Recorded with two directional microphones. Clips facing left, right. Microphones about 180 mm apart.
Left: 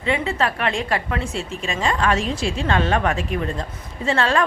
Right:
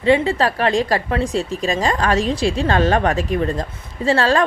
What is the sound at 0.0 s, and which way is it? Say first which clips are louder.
A woman's voice: right 6 dB; 35° right (ahead or behind).